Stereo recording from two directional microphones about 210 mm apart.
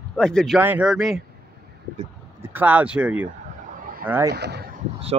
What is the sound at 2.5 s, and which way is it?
Speech, 10° right (ahead or behind).